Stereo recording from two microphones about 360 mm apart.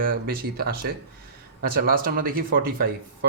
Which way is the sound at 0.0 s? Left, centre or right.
Right.